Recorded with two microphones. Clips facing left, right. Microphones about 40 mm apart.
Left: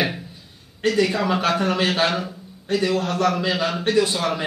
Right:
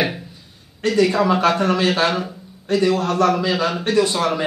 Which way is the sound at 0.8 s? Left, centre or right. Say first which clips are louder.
Right 3 dB; centre.